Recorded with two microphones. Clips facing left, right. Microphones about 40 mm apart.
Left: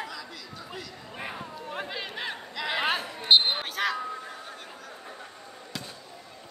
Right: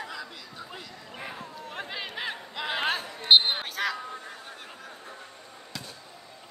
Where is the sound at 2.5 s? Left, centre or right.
Right.